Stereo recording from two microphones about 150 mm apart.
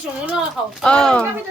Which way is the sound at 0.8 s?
5° left (ahead or behind).